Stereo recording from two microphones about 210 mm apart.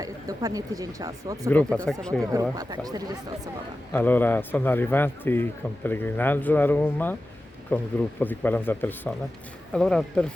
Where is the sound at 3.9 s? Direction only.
10° left (ahead or behind).